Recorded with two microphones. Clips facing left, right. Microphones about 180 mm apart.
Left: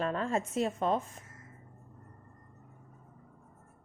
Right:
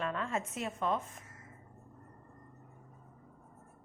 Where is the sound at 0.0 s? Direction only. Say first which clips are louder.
Left 4 dB; 35° left (ahead or behind).